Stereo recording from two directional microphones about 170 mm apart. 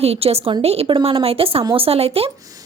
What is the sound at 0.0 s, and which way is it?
A woman's voice, 35° right (ahead or behind).